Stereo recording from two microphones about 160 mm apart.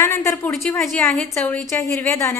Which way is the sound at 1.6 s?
20° left (ahead or behind).